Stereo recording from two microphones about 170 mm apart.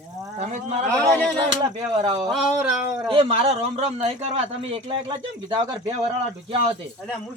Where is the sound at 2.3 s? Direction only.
5° right (ahead or behind).